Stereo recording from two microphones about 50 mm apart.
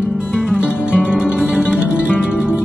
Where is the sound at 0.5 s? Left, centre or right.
Right.